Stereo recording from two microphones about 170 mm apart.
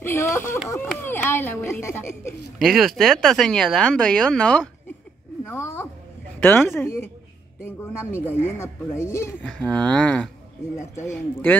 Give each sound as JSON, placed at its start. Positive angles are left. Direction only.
{"t": 0.0, "sound": "a sound", "side_deg": 15}
{"t": 0.7, "sound": "speech", "side_deg": 15}
{"t": 2.6, "sound": "speech", "side_deg": 0}
{"t": 5.4, "sound": "a sound", "side_deg": 15}
{"t": 6.7, "sound": "speech", "side_deg": 15}
{"t": 9.5, "sound": "speech", "side_deg": 5}